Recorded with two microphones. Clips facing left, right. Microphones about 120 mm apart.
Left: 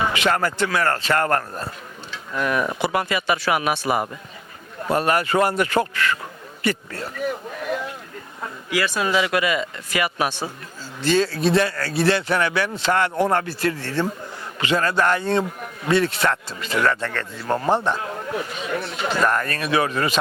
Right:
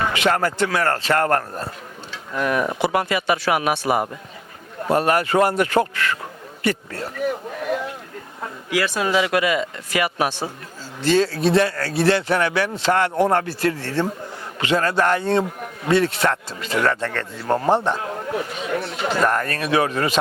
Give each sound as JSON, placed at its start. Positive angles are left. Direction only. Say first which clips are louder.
{"t": 0.2, "sound": "a man's voice", "louder": "right 1 dB", "side_deg": -45}
{"t": 9.0, "sound": "a man's voice", "louder": "right 1 dB", "side_deg": -55}
{"t": 11.9, "sound": "speech", "louder": "right 1 dB", "side_deg": -55}
{"t": 13.2, "sound": "speech", "louder": "right 2 dB", "side_deg": -40}
{"t": 14.6, "sound": "a man's voice", "louder": "right 1 dB", "side_deg": -50}
{"t": 15.4, "sound": "a man's voice", "louder": "right 1 dB", "side_deg": -40}
{"t": 16.3, "sound": "a man's voice", "louder": "right 1 dB", "side_deg": -55}